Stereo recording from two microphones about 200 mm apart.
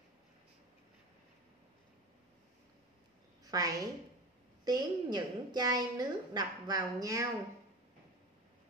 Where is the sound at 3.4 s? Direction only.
20° right (ahead or behind).